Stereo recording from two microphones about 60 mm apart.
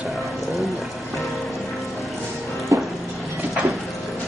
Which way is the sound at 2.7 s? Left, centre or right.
Right.